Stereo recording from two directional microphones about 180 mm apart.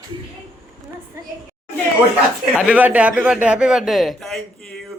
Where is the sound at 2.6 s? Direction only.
10° right (ahead or behind).